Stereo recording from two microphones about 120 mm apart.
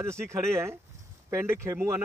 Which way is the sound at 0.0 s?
20° right (ahead or behind).